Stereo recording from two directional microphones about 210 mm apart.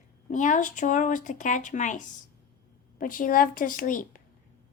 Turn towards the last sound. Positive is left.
turn(degrees=40)  # may be behind; listen again after turning